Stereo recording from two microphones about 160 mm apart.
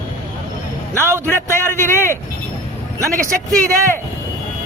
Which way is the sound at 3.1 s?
55° right (ahead or behind).